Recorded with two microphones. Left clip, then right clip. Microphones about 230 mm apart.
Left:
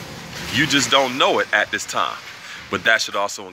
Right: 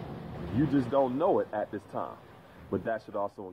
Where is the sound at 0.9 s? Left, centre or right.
Left.